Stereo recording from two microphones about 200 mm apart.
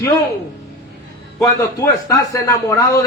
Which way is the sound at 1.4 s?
15° left (ahead or behind).